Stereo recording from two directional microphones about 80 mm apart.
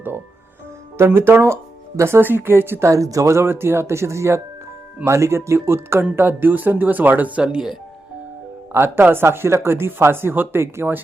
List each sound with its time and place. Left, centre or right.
0.9 s speech: right
2.9 s speech: right; by 7.8 s centre
8.7 s speech: right